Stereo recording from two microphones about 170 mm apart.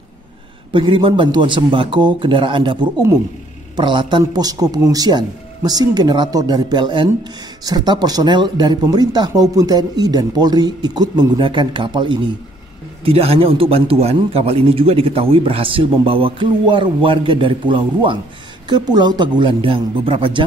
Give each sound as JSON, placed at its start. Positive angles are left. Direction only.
{"t": 0.7, "sound": "a man's voice", "side_deg": -30}